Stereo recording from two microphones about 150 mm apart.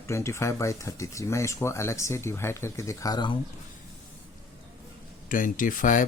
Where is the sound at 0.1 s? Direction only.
20° left (ahead or behind).